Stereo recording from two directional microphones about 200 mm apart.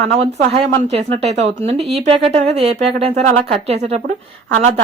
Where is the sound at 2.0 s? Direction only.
30° right (ahead or behind).